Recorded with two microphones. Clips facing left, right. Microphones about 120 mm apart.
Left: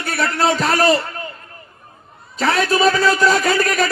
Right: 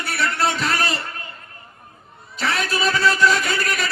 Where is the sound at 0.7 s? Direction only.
35° left (ahead or behind).